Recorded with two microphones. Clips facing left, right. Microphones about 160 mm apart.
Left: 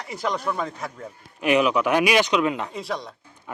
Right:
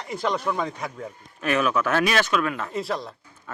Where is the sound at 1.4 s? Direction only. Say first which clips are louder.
Left 3 dB; 15° left (ahead or behind).